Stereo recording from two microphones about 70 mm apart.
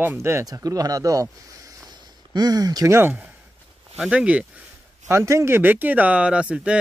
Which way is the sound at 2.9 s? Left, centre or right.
Right.